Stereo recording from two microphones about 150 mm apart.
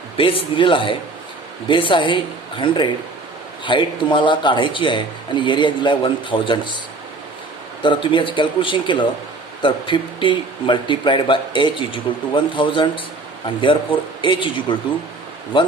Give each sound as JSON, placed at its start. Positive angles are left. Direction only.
{"t": 0.2, "sound": "speech", "side_deg": 35}
{"t": 7.8, "sound": "speech", "side_deg": 35}